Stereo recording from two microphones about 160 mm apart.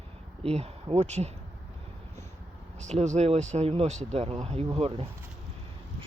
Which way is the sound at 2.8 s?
45° right (ahead or behind).